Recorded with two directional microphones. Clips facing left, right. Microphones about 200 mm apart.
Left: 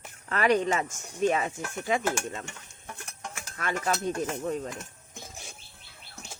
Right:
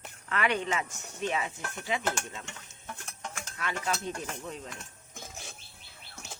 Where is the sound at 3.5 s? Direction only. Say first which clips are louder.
Left 4 dB; 45° left (ahead or behind).